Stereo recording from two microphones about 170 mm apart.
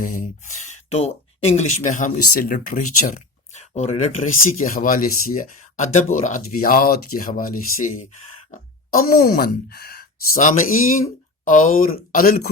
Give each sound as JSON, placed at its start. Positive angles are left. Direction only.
{"t": 0.0, "sound": "speech", "side_deg": 50}
{"t": 4.7, "sound": "speech", "side_deg": 55}